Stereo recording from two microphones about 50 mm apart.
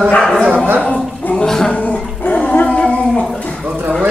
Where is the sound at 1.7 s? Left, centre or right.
Left.